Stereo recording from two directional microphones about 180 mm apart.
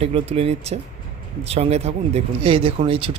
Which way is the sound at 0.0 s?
35° right (ahead or behind).